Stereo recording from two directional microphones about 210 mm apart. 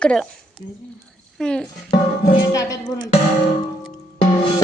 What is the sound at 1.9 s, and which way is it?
Music, 35° left (ahead or behind).